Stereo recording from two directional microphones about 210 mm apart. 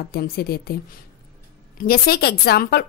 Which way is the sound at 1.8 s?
45° left (ahead or behind).